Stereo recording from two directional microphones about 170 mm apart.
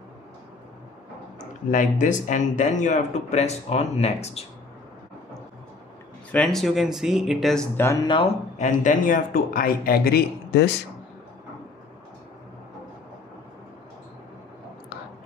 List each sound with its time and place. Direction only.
1.7 s speech: 50° left (ahead or behind)
6.3 s speech: 5° left (ahead or behind)
7.7 s speech: 15° left (ahead or behind)
8.5 s a man's voice: 50° left (ahead or behind); by 10.7 s 70° left (ahead or behind)